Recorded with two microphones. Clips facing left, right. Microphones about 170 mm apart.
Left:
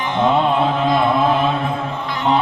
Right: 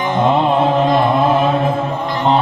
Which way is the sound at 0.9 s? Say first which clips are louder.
Right 2 dB; centre (ahead or behind).